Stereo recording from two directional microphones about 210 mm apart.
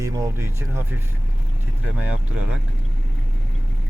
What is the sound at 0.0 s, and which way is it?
Speech, 15° right (ahead or behind).